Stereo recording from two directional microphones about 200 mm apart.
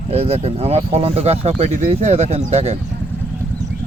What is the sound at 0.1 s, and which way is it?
Speech, 30° right (ahead or behind).